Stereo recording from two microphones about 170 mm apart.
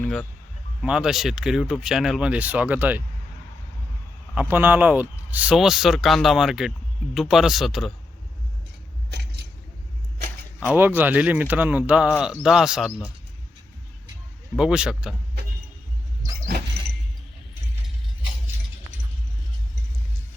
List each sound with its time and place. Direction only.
0.0 s a sound: 5° left (ahead or behind)
0.8 s speech: 5° right (ahead or behind)
4.4 s speech: 10° right (ahead or behind)
9.0 s a sound: 75° right (ahead or behind)
10.6 s speech: 10° right (ahead or behind)
14.5 s speech: 5° right (ahead or behind)